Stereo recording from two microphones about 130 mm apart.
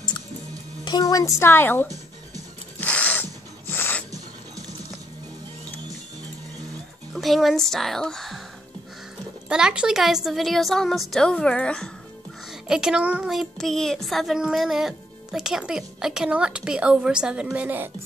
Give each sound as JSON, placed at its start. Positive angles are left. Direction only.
{"t": 0.8, "sound": "speech", "side_deg": 30}
{"t": 2.8, "sound": "a sound", "side_deg": 10}
{"t": 7.2, "sound": "a child's voice", "side_deg": 0}
{"t": 9.5, "sound": "a child's voice", "side_deg": -5}
{"t": 12.4, "sound": "a child's voice", "side_deg": -5}